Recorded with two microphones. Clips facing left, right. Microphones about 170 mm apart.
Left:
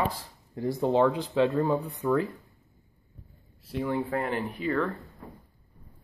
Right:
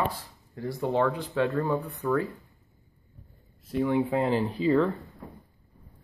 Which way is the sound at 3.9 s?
15° right (ahead or behind).